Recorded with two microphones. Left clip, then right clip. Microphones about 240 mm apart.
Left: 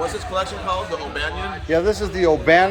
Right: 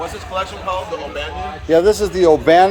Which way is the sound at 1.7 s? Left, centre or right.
Right.